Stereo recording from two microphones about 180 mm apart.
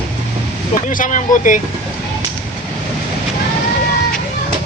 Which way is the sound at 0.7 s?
45° left (ahead or behind).